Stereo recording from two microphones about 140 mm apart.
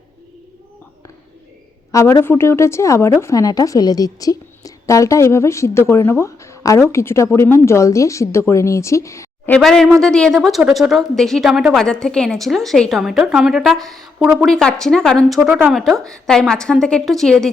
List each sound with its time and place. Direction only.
1.9 s a woman's voice: 20° left (ahead or behind)
9.5 s a woman's voice: centre (ahead or behind)
15.4 s speech: 15° right (ahead or behind)
15.7 s a woman's voice: centre (ahead or behind)